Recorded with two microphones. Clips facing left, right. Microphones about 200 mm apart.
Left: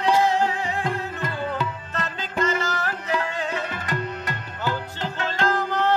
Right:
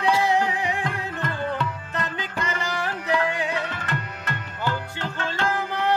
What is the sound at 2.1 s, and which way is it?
Music, 15° right (ahead or behind).